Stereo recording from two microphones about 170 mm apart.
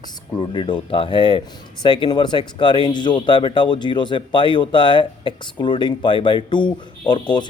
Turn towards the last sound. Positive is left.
turn(degrees=25)  # may be behind; listen again after turning